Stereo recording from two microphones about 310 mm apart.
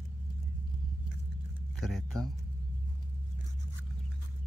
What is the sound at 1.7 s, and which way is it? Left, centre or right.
Speech, centre.